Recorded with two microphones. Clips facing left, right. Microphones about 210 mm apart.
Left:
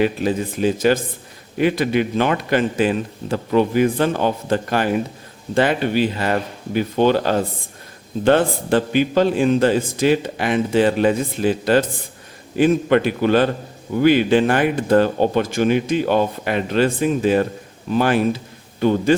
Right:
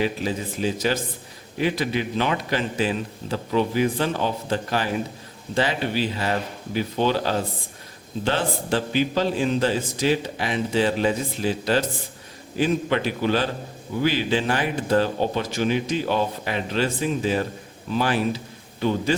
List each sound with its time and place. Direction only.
0.0 s a man's voice: 55° left (ahead or behind)